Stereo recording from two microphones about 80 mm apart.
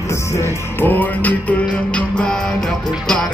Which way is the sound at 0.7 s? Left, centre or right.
Left.